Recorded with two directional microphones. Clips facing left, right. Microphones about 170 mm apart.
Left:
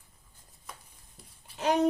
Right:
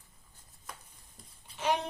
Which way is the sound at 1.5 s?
40° left (ahead or behind).